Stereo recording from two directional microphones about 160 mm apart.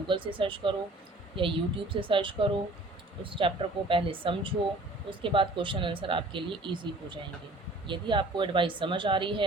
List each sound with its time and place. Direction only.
0.1 s speech: 30° right (ahead or behind)